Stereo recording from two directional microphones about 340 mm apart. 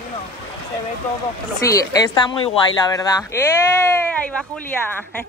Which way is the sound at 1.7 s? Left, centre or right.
Centre.